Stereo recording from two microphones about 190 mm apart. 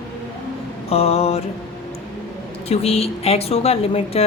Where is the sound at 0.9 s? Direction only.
35° left (ahead or behind).